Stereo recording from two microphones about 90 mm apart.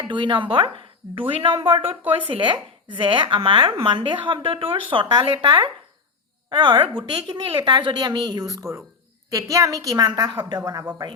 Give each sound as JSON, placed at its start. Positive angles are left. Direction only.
{"t": 0.0, "sound": "a woman's voice", "side_deg": -60}